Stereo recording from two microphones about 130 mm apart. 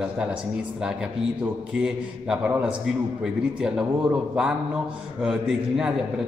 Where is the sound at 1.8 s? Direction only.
5° right (ahead or behind).